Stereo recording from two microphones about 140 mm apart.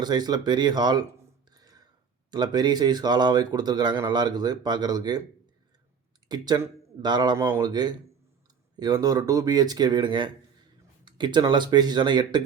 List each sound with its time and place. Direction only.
0.0 s speech: 30° right (ahead or behind)
1.5 s a sound: 25° right (ahead or behind)
2.3 s speech: 30° right (ahead or behind)
6.2 s speech: 30° right (ahead or behind)